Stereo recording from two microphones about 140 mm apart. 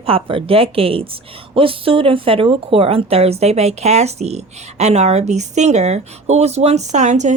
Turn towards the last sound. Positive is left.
turn(degrees=-60)  # may be behind; listen again after turning